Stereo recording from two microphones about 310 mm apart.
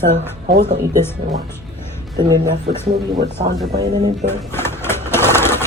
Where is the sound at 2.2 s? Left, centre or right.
Centre.